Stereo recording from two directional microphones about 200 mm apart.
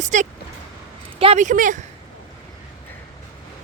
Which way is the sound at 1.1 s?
30° right (ahead or behind).